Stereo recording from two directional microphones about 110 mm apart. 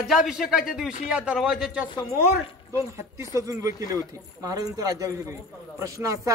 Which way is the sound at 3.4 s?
30° right (ahead or behind).